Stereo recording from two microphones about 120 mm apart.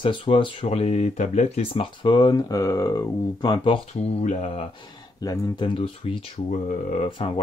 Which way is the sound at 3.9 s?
60° left (ahead or behind).